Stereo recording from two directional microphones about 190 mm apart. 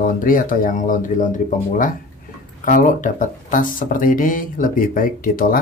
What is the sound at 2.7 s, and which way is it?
Speech, 45° left (ahead or behind).